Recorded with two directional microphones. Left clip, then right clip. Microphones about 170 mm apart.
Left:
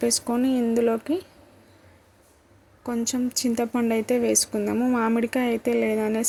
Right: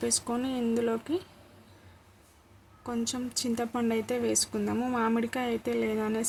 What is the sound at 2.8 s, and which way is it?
Speech, 20° left (ahead or behind).